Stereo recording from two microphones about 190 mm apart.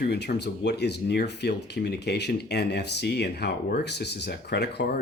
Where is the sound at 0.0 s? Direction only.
60° left (ahead or behind).